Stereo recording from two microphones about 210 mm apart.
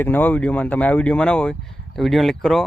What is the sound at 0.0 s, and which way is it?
Speech, 10° left (ahead or behind).